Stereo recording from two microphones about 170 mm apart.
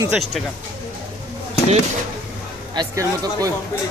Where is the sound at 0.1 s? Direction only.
Centre (ahead or behind).